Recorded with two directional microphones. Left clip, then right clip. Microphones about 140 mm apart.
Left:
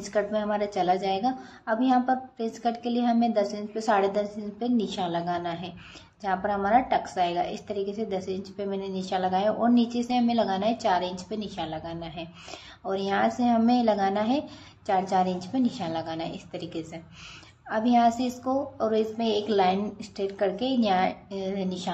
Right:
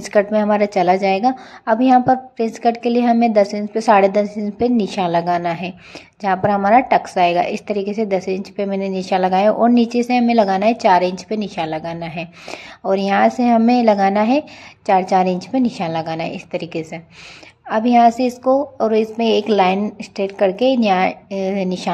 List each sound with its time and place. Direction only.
0.0 s a woman's voice: 50° right (ahead or behind)